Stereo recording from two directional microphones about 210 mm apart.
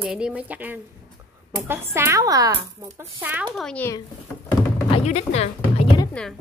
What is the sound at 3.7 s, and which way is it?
Speech, 10° left (ahead or behind).